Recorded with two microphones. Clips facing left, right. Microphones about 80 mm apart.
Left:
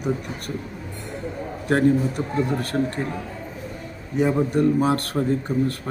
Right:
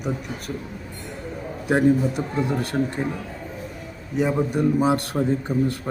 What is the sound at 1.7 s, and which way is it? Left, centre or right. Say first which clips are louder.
Speech: even; centre.